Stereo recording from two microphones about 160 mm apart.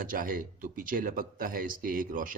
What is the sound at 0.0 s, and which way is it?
Speech, 60° right (ahead or behind).